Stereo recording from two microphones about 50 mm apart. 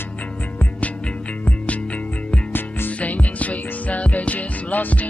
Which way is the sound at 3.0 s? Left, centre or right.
Left.